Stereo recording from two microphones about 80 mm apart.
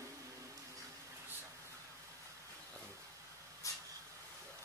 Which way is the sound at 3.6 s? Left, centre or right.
Left.